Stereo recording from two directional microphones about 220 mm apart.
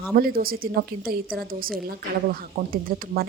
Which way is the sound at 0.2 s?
40° right (ahead or behind).